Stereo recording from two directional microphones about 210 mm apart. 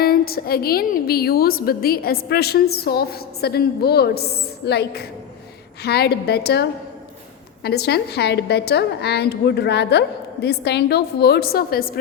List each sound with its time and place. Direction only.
0.0 s a woman's voice: 45° left (ahead or behind)